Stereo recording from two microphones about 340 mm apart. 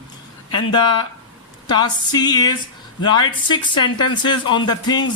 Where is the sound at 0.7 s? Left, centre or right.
Centre.